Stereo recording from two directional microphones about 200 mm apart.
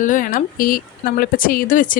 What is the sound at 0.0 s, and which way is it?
Speech, 40° left (ahead or behind).